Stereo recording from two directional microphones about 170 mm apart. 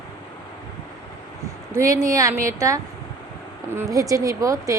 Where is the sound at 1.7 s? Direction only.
20° right (ahead or behind).